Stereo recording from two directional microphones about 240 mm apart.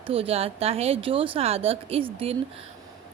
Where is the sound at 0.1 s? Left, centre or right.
Right.